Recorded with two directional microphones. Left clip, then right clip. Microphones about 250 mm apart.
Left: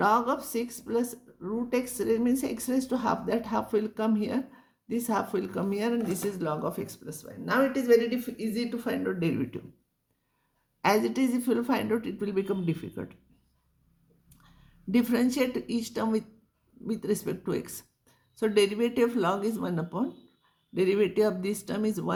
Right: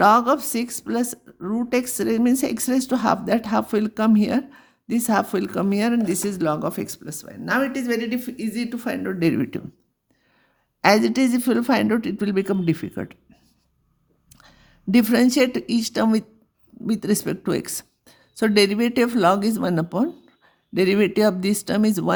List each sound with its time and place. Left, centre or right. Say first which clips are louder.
0.0 s speech: right 9 dB; right
10.8 s speech: right 8 dB; right
14.4 s a woman's voice: right 10 dB; right